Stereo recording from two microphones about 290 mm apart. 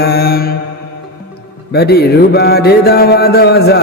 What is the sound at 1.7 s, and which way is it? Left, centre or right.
Mantra, left.